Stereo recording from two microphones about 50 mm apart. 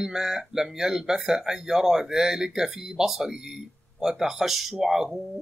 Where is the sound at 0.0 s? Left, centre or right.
Centre.